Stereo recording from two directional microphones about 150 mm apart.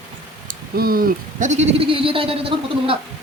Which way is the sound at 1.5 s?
45° right (ahead or behind).